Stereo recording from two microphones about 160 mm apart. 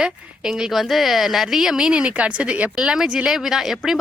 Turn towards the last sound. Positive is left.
turn(degrees=0)  # may be behind; listen again after turning